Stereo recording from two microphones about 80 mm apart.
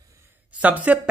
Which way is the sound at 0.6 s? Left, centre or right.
Centre.